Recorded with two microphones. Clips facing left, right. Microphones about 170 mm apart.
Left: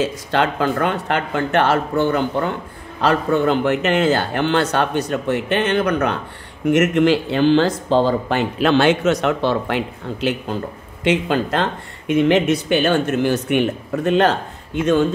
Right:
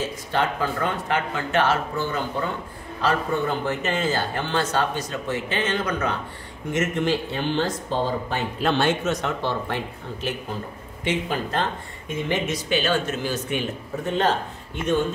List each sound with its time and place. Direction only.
0.0 s speech: 80° left